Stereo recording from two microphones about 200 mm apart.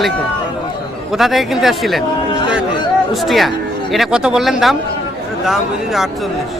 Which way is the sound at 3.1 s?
Centre (ahead or behind).